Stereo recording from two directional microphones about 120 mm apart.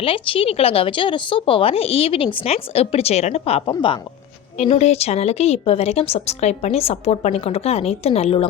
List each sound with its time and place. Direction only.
0.0 s speech: 50° left (ahead or behind)
3.7 s speech: 40° left (ahead or behind)
4.5 s speech: 65° left (ahead or behind)